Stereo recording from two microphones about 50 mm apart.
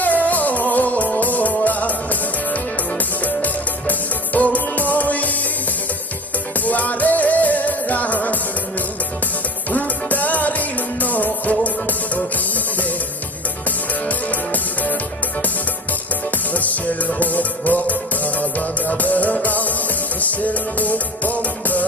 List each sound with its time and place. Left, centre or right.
0.0 s music: left
6.7 s music: left
16.5 s music: left